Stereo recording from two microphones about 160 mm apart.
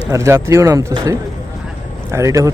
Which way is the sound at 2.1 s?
20° right (ahead or behind).